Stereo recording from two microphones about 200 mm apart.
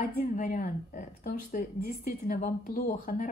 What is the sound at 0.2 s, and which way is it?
A woman's voice, 45° left (ahead or behind).